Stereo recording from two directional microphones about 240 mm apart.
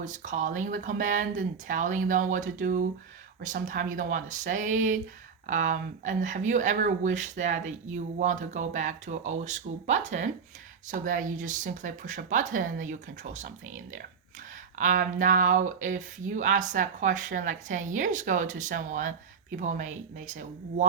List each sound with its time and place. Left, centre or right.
0.0 s speech: right